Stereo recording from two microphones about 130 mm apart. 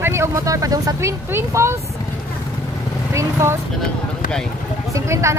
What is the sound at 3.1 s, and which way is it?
Speech, 20° right (ahead or behind).